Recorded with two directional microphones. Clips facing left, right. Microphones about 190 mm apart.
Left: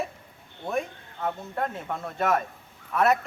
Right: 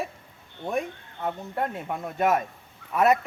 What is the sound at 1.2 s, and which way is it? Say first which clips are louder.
Speech: right 1 dB; 10° right (ahead or behind).